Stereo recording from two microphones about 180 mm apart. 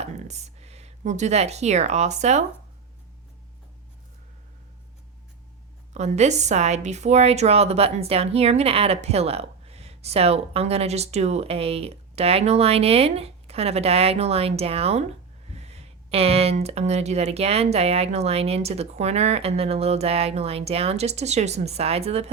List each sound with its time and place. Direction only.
0.0 s speech: 40° right (ahead or behind)
5.9 s a woman's voice: 40° right (ahead or behind)